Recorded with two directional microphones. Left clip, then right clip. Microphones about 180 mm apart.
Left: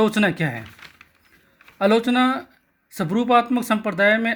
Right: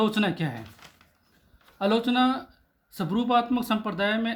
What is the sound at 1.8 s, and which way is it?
Speech, 25° left (ahead or behind).